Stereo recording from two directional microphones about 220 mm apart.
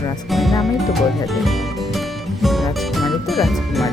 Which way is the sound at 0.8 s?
Centre (ahead or behind).